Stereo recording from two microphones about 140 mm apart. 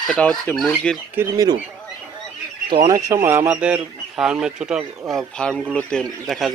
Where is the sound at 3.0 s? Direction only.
20° right (ahead or behind).